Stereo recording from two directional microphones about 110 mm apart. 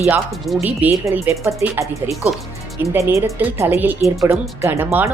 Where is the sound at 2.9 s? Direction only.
25° right (ahead or behind).